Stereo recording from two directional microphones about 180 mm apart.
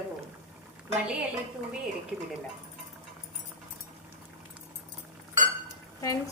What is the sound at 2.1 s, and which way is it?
Speech, centre (ahead or behind).